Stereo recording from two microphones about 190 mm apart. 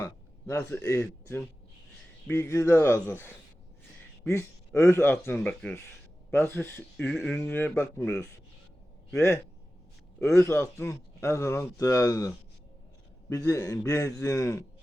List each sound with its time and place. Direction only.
0.0 s a sound: 15° left (ahead or behind)
2.2 s a man's voice: 15° left (ahead or behind)
13.3 s a man's voice: 15° left (ahead or behind)